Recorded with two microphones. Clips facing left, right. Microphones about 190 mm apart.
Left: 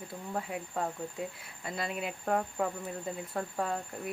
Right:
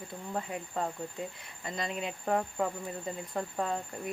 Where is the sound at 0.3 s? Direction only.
Centre (ahead or behind).